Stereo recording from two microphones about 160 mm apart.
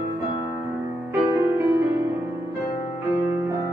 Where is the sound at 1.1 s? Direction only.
15° right (ahead or behind).